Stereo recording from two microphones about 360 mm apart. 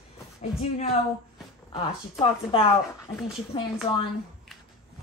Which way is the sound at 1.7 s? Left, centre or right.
Centre.